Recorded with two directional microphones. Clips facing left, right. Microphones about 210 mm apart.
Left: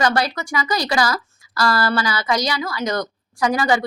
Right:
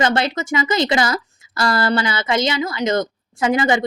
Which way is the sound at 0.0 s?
25° right (ahead or behind).